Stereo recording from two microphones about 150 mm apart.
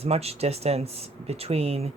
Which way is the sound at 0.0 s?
45° right (ahead or behind).